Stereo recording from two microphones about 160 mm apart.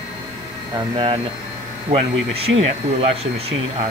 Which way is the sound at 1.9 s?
40° right (ahead or behind).